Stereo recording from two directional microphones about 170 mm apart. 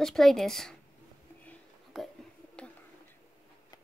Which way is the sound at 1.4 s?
10° left (ahead or behind).